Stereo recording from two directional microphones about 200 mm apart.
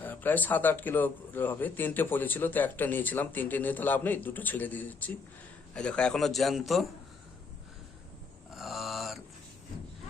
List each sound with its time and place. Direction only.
0.0 s a man's voice: 10° left (ahead or behind)
8.5 s mantra: centre (ahead or behind)